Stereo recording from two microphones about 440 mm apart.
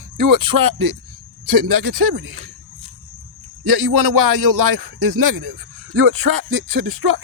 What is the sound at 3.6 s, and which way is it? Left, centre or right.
A man's voice, right.